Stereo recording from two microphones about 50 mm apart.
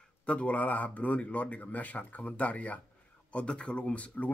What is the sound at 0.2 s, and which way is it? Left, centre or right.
Speech, left.